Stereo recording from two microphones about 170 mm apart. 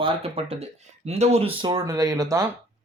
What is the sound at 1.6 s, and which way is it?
Speech, 20° right (ahead or behind).